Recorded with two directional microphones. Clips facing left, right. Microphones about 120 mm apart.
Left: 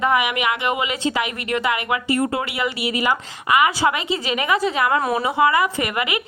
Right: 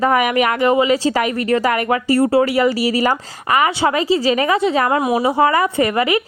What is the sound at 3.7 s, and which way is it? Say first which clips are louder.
Speech: right 5 dB; 30° right (ahead or behind).